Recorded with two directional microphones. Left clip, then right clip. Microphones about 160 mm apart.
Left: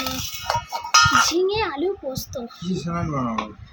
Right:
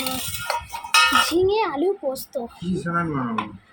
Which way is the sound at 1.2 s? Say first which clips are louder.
Right 1 dB; 10° right (ahead or behind).